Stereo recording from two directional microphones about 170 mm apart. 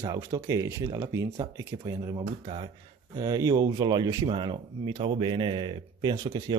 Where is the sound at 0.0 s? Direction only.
20° right (ahead or behind).